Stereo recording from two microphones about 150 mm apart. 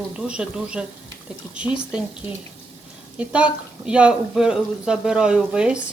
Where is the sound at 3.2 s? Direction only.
10° right (ahead or behind).